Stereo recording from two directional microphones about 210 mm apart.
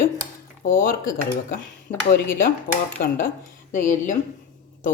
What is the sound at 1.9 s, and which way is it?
Speech, 35° left (ahead or behind).